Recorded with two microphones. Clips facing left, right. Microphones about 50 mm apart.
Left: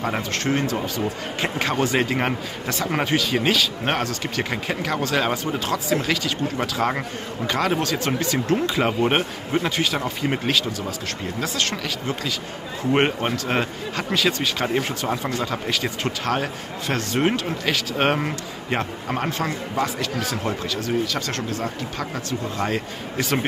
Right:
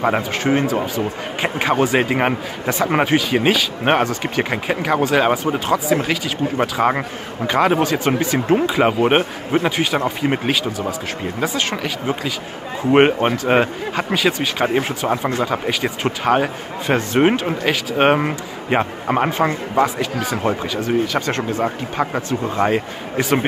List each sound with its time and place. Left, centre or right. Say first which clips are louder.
0.4 s speech: right 5 dB; centre